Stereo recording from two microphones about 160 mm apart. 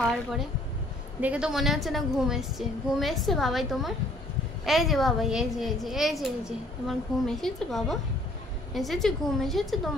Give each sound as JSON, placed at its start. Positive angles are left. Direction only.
{"t": 0.0, "sound": "a woman's voice", "side_deg": 0}